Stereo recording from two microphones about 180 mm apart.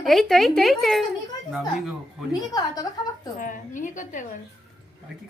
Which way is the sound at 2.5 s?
20° left (ahead or behind).